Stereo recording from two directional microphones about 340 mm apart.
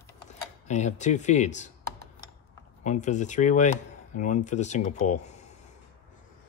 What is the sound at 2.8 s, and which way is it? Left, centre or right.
Speech, left.